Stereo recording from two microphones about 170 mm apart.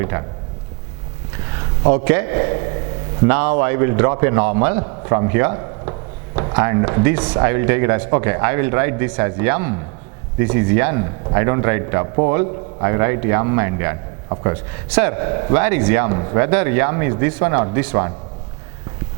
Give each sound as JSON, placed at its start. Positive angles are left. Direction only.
{"t": 0.0, "sound": "speech", "side_deg": -20}
{"t": 1.9, "sound": "a man's voice", "side_deg": -20}
{"t": 4.8, "sound": "a man's voice", "side_deg": -25}
{"t": 14.9, "sound": "a man's voice", "side_deg": -15}
{"t": 15.2, "sound": "a man's voice", "side_deg": -25}